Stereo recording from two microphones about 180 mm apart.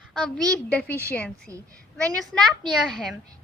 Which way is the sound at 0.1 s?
5° left (ahead or behind).